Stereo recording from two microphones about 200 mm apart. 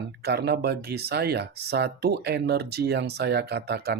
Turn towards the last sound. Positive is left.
turn(degrees=-55)  # may be behind; listen again after turning